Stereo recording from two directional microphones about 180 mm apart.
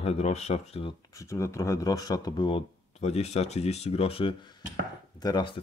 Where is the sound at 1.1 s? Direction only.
15° left (ahead or behind).